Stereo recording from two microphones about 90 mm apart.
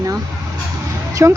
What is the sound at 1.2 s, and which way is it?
Speech, 35° right (ahead or behind).